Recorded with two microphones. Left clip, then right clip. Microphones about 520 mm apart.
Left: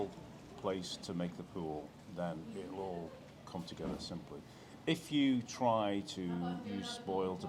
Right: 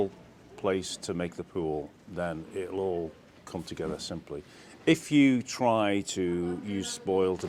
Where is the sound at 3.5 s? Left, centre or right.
Right.